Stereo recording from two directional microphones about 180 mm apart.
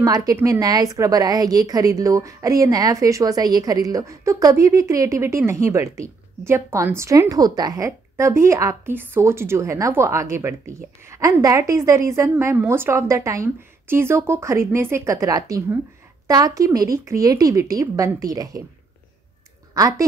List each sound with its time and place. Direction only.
0.0 s a woman's voice: 20° right (ahead or behind)
19.7 s a woman's voice: 20° right (ahead or behind)